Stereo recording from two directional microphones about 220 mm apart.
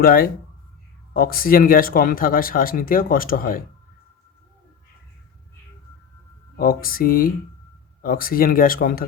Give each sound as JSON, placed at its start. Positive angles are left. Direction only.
{"t": 0.0, "sound": "speech", "side_deg": 40}
{"t": 6.6, "sound": "speech", "side_deg": 40}